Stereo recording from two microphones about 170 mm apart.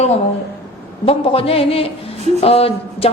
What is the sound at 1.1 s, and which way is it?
A woman's voice, 35° left (ahead or behind).